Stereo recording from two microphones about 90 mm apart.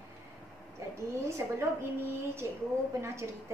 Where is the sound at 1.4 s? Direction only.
25° right (ahead or behind).